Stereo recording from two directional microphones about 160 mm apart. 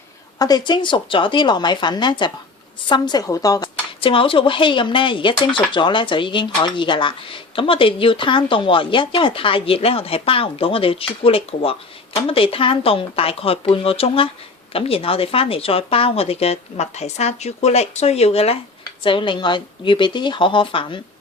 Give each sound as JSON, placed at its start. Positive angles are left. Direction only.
{"t": 0.3, "sound": "a woman's voice", "side_deg": 25}